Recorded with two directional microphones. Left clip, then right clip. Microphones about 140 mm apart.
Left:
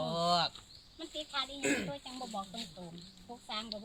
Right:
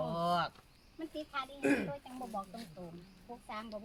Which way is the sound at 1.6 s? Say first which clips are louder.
Right 3 dB; 30° right (ahead or behind).